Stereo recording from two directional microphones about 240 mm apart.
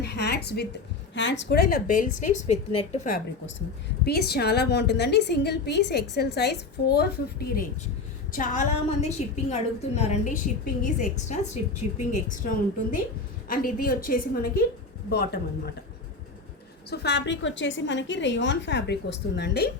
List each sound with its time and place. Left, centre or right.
0.0 s a woman's voice: left
4.0 s a woman's voice: left
16.9 s a woman's voice: left